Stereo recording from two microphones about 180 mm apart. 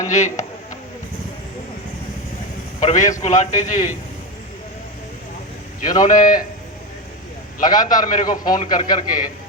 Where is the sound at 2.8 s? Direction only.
40° left (ahead or behind).